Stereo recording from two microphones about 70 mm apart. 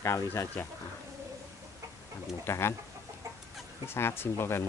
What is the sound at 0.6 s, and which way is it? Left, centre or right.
Speech, left.